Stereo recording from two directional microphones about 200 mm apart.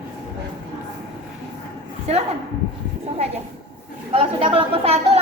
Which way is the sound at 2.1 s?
30° right (ahead or behind).